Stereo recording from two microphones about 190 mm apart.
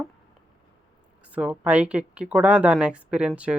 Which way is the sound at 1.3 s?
5° right (ahead or behind).